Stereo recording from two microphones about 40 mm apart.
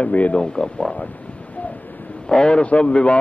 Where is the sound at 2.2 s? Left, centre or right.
Left.